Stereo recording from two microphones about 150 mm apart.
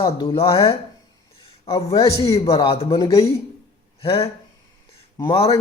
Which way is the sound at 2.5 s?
35° left (ahead or behind).